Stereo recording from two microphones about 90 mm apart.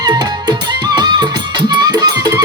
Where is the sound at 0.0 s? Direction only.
50° right (ahead or behind).